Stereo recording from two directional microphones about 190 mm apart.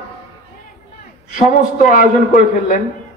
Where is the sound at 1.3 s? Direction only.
45° left (ahead or behind).